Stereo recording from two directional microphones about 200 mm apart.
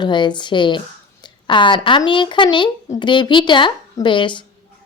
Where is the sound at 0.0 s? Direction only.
20° left (ahead or behind).